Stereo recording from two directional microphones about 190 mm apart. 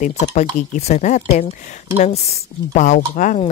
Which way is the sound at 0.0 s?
40° left (ahead or behind).